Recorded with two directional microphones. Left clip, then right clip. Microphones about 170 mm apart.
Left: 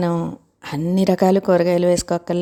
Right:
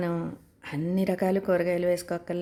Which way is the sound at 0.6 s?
35° left (ahead or behind).